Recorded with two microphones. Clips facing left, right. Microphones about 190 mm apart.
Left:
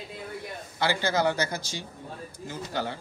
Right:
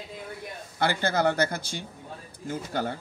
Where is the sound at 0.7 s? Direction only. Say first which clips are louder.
Right 1 dB; 55° right (ahead or behind).